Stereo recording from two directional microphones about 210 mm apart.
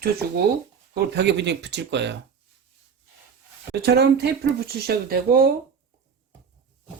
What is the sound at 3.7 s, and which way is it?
Speech, 50° right (ahead or behind).